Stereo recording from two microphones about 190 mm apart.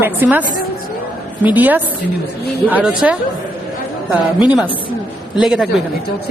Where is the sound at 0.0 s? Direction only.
10° right (ahead or behind).